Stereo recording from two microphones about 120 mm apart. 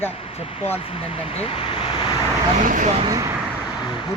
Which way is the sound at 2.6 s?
90° right.